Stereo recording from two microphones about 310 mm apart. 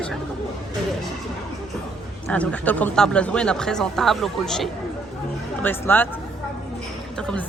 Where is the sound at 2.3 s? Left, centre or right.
Centre.